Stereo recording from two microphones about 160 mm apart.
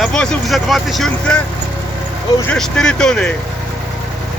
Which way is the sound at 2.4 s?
5° left (ahead or behind).